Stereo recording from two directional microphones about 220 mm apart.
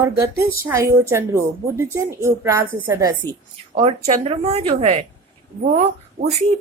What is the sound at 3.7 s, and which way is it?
A woman's voice, 30° right (ahead or behind).